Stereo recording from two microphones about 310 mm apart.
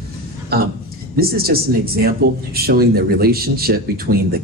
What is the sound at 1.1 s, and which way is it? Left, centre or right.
Speech, right.